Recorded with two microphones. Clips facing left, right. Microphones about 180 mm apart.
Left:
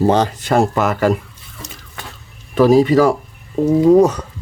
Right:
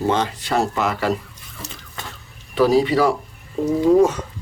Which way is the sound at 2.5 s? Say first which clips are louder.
Left 5 dB; 45° left (ahead or behind).